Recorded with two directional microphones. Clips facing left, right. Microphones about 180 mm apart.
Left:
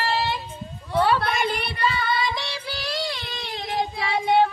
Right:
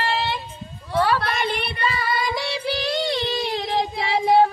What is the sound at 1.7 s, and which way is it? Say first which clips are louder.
Child singing: even; centre (ahead or behind).